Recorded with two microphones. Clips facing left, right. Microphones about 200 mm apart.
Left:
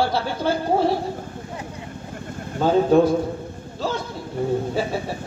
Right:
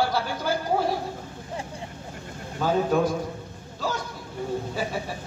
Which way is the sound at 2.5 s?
30° left (ahead or behind).